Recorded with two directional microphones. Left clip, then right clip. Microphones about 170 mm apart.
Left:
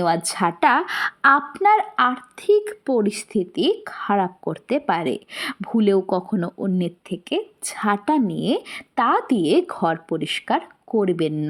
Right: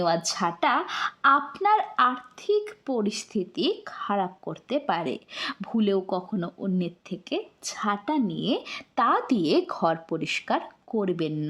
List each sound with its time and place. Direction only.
0.0 s speech: 15° left (ahead or behind)